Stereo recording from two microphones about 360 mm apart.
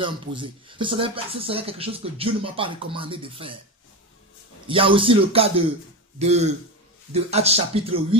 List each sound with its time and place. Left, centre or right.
0.0 s speech: centre
4.6 s speech: centre